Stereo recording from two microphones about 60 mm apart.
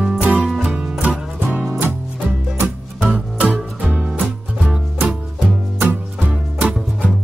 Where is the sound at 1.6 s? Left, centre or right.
Right.